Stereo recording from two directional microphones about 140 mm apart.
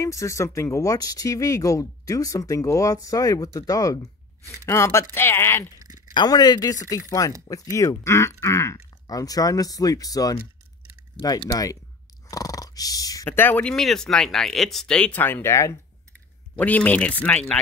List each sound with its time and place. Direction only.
0.0 s speech: 20° left (ahead or behind)
6.1 s speech: 30° left (ahead or behind); by 17.6 s 10° left (ahead or behind)